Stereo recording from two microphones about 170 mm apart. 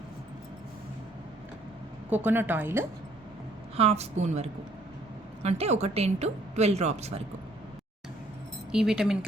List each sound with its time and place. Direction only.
2.0 s a woman's voice: 10° right (ahead or behind)
3.8 s a woman's voice: 40° right (ahead or behind)
8.7 s speech: 5° right (ahead or behind)